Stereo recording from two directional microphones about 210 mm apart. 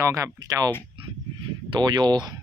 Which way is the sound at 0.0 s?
15° right (ahead or behind).